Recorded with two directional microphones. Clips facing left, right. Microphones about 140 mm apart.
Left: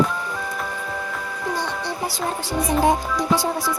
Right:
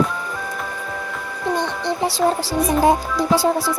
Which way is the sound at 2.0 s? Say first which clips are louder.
Right 10 dB; 30° right (ahead or behind).